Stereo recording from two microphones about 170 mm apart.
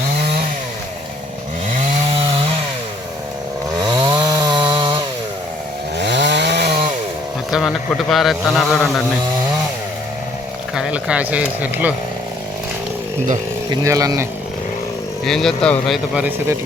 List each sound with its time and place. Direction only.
3.8 s chainsaw: 25° right (ahead or behind)
6.0 s chainsaw: 90° right; by 6.8 s 75° right (ahead or behind)
8.1 s speech: centre (ahead or behind)
10.8 s speech: 5° right (ahead or behind)
13.7 s speech: 20° right (ahead or behind)
15.2 s speech: centre (ahead or behind)
16.1 s speech: 10° right (ahead or behind)